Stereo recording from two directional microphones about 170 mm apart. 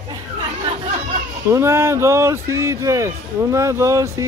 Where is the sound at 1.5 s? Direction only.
15° right (ahead or behind).